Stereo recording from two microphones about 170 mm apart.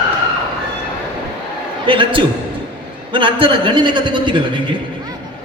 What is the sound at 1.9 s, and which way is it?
A man's voice, 30° right (ahead or behind).